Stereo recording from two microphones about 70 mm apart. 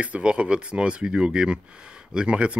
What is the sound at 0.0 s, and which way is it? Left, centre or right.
Speech, centre.